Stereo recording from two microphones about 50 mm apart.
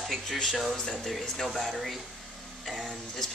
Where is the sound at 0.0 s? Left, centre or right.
Centre.